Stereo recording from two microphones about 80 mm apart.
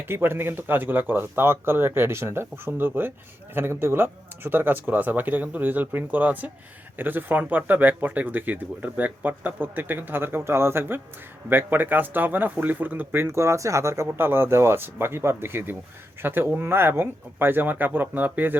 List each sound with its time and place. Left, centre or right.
0.0 s speech: right